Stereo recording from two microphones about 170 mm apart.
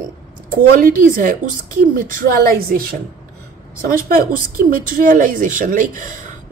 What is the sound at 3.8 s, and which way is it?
A woman's voice, 55° right (ahead or behind).